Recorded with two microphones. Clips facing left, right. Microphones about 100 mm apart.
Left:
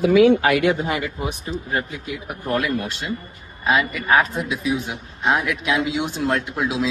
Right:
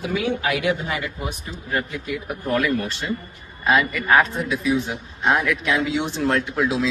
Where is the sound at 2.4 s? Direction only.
5° left (ahead or behind).